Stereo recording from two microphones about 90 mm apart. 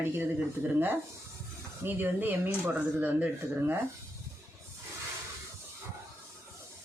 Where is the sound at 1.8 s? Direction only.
20° right (ahead or behind).